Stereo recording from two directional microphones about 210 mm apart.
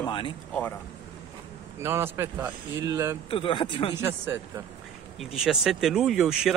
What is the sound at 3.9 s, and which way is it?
Speech, 10° right (ahead or behind).